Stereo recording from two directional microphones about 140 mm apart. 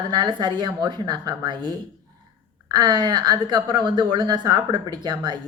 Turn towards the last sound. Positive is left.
turn(degrees=-35)  # may be behind; listen again after turning